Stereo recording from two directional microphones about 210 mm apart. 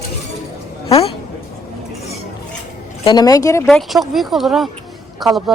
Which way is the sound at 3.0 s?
20° left (ahead or behind).